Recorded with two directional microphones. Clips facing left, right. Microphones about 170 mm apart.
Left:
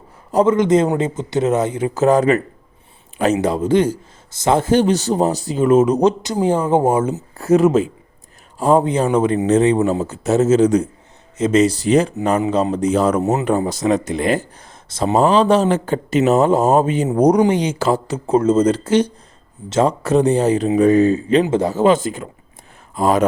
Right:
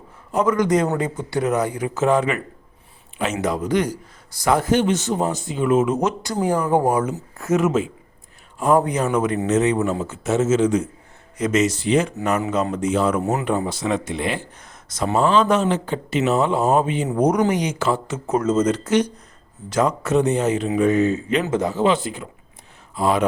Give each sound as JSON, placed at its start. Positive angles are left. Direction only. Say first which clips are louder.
{"t": 0.3, "sound": "a woman's voice", "louder": "left 5 dB", "side_deg": 30}
{"t": 2.0, "sound": "a man's voice", "louder": "left 5 dB", "side_deg": 40}
{"t": 3.4, "sound": "a man's voice", "louder": "left 2 dB", "side_deg": 30}
{"t": 6.2, "sound": "a woman's voice", "louder": "left 4 dB", "side_deg": 25}
{"t": 14.8, "sound": "a man's voice", "louder": "left 4 dB", "side_deg": 30}
{"t": 15.7, "sound": "a man's voice", "louder": "left 5 dB", "side_deg": 45}
{"t": 21.8, "sound": "speech", "louder": "left 5 dB", "side_deg": 45}